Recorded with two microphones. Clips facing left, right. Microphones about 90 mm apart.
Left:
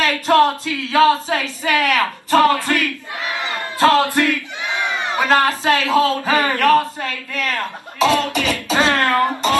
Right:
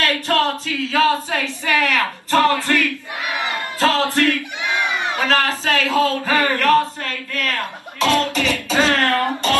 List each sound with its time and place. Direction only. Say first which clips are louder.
0.0 s a sound: left 5 dB; 20° left (ahead or behind)
0.9 s speech: left 4 dB; 15° left (ahead or behind)
3.3 s battle cry: right 1 dB; 20° right (ahead or behind)
3.5 s crowd: left 5 dB; 20° left (ahead or behind)
5.1 s a man's voice: left 5 dB; 15° left (ahead or behind)